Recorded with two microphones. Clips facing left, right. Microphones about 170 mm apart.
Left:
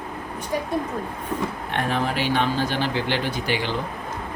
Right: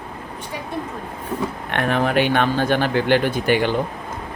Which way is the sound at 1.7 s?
65° right (ahead or behind).